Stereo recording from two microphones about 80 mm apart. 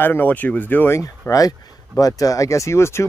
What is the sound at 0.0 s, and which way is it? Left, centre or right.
Speech, left.